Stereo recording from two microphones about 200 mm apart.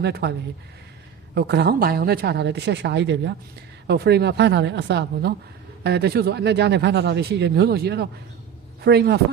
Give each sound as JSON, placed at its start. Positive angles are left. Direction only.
{"t": 0.0, "sound": "speech", "side_deg": -55}
{"t": 1.4, "sound": "speech", "side_deg": -55}